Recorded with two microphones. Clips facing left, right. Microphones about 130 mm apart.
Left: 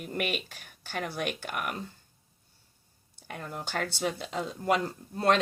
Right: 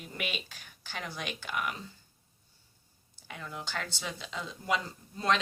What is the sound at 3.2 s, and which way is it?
Speech, 50° left (ahead or behind).